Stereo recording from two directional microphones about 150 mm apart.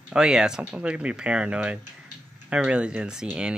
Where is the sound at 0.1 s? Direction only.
5° right (ahead or behind).